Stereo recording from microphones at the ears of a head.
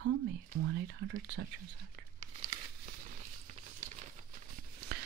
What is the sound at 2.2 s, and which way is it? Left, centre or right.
Crumpling, right.